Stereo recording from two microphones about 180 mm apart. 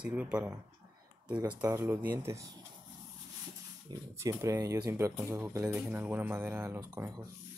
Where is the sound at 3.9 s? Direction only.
15° right (ahead or behind).